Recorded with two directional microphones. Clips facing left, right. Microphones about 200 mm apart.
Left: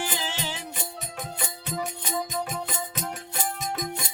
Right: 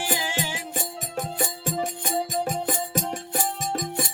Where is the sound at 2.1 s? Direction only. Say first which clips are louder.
Right 4 dB; 40° right (ahead or behind).